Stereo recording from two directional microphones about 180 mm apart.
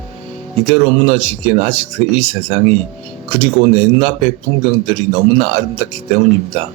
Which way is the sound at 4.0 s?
35° right (ahead or behind).